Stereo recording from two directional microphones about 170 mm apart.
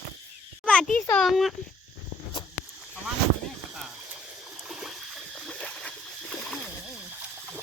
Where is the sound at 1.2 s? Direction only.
Centre (ahead or behind).